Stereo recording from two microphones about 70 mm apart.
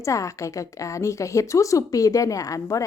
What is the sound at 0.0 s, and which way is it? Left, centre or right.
A woman's voice, left.